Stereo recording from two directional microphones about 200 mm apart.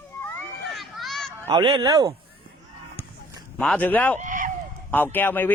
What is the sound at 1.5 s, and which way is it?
Fowl, 25° right (ahead or behind).